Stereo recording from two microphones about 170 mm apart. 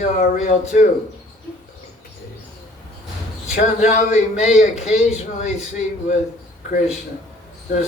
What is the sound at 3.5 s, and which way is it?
A man's voice, 45° left (ahead or behind).